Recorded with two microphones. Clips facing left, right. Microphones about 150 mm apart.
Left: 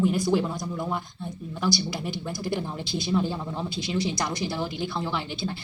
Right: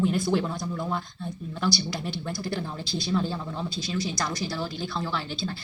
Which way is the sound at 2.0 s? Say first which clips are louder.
Left 1 dB; 15° left (ahead or behind).